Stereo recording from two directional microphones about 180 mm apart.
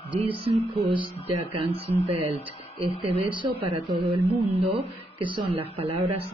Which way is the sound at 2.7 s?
35° right (ahead or behind).